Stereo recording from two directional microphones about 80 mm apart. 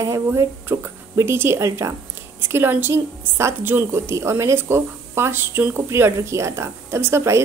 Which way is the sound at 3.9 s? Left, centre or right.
Right.